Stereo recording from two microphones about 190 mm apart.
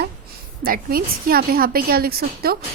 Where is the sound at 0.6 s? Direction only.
50° right (ahead or behind).